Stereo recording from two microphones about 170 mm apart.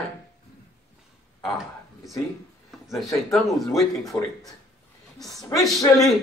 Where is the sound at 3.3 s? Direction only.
Centre (ahead or behind).